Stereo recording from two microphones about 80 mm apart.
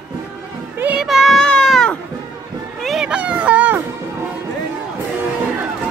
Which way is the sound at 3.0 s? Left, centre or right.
Centre.